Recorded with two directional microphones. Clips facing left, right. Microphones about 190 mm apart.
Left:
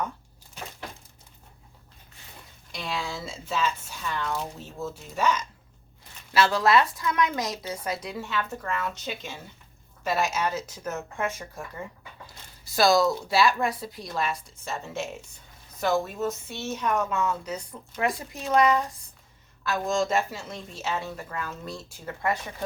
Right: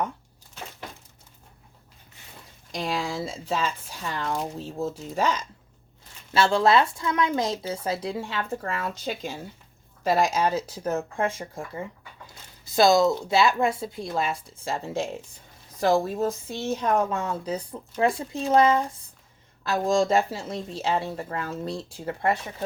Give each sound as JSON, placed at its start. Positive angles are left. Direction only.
{"t": 2.7, "sound": "a woman's voice", "side_deg": -35}